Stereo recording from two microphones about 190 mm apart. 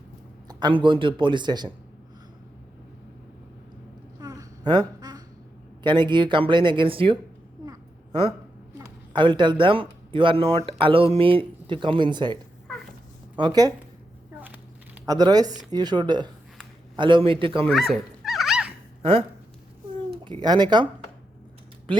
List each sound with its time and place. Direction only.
0.4 s speech: 25° right (ahead or behind)
4.2 s a sound: 20° right (ahead or behind)
5.8 s speech: 25° right (ahead or behind)
9.1 s speech: 25° right (ahead or behind)
14.3 s a sound: 10° right (ahead or behind)
15.0 s speech: 20° right (ahead or behind)
17.7 s dog: centre (ahead or behind)
20.1 s speech: 25° right (ahead or behind)
21.9 s speech: 25° right (ahead or behind)